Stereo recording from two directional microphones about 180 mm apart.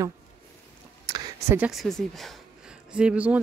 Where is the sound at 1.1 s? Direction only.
20° right (ahead or behind).